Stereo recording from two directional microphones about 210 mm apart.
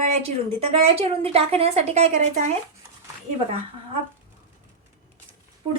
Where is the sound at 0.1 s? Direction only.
30° right (ahead or behind).